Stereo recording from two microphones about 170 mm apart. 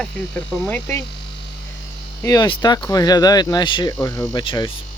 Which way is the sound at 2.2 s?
25° left (ahead or behind).